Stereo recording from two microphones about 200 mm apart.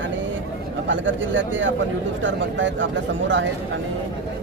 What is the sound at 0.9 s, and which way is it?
Speech, 70° right (ahead or behind).